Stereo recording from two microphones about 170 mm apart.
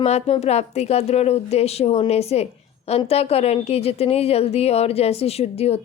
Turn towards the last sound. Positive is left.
turn(degrees=35)  # may be behind; listen again after turning